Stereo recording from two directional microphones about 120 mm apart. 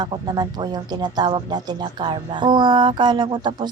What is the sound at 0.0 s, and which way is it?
A woman's voice, 35° right (ahead or behind).